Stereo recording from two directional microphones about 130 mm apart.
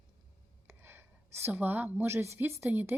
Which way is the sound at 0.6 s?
15° right (ahead or behind).